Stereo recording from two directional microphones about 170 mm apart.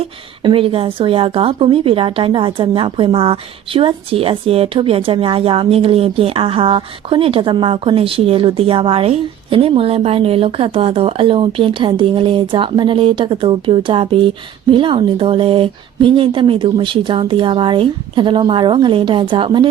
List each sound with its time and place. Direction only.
0.0 s a woman's voice: 30° right (ahead or behind)